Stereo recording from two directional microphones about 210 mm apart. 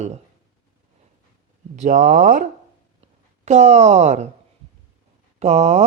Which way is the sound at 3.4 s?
35° right (ahead or behind).